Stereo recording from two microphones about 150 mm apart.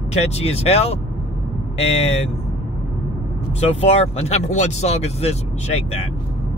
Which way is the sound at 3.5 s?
45° left (ahead or behind).